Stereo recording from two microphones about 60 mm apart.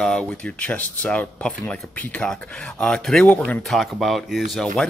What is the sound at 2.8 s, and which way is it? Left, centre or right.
Speech, centre.